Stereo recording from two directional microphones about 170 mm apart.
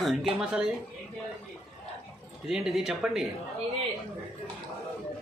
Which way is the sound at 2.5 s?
5° right (ahead or behind).